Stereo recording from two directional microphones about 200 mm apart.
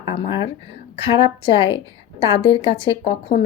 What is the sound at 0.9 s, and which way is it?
Speech, 30° left (ahead or behind).